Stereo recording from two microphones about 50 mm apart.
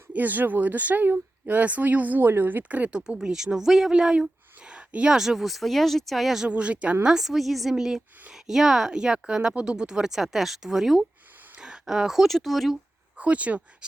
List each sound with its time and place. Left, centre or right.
0.1 s speech: right
3.2 s speech: centre
5.1 s speech: centre
6.5 s speech: right
7.0 s speech: centre
13.1 s speech: right